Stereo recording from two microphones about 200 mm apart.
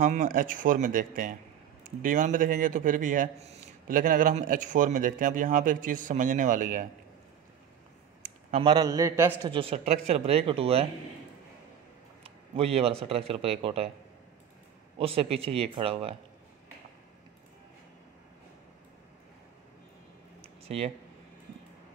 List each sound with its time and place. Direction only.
0.0 s a man's voice: 45° right (ahead or behind)
8.2 s a sound: 40° right (ahead or behind)
8.6 s a man's voice: 20° right (ahead or behind)
9.4 s speech: 25° right (ahead or behind)
12.2 s a man's voice: 30° right (ahead or behind)
15.0 s speech: 30° right (ahead or behind)
20.6 s speech: 30° right (ahead or behind)